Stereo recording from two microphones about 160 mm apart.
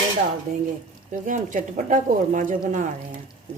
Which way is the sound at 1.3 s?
50° right (ahead or behind).